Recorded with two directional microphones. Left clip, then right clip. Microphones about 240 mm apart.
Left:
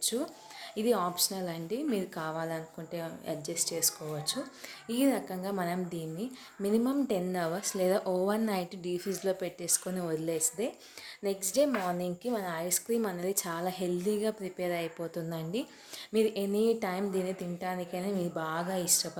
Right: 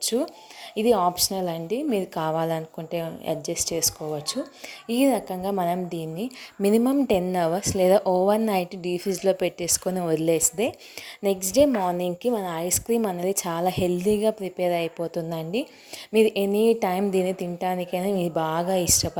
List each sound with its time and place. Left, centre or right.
0.0 s a woman's voice: right